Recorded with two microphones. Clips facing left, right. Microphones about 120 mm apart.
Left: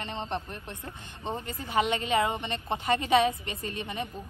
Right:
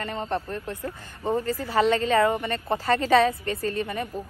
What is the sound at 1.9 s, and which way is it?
A woman's voice, 20° left (ahead or behind).